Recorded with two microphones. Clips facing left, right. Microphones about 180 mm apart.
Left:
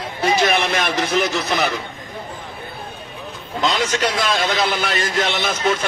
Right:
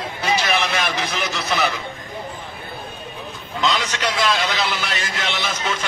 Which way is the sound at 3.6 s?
50° left (ahead or behind).